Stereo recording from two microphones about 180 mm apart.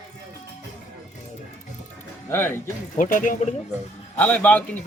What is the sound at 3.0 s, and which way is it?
Speech, 50° left (ahead or behind).